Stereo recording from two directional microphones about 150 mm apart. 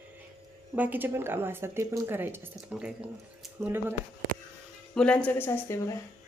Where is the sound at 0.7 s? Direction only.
10° right (ahead or behind).